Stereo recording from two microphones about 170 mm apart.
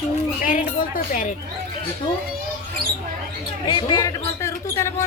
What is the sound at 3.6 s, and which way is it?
Speech, 25° left (ahead or behind).